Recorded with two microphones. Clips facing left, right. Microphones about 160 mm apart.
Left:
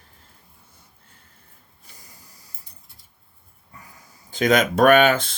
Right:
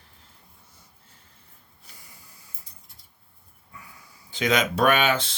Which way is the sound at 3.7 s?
40° left (ahead or behind).